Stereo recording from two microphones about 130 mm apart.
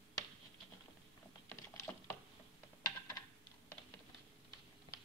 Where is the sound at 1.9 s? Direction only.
20° left (ahead or behind).